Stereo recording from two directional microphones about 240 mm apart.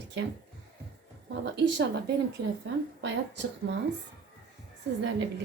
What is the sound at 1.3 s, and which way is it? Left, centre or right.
Speech, right.